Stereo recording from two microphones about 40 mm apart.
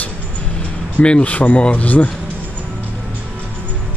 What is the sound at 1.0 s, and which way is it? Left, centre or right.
Speech, left.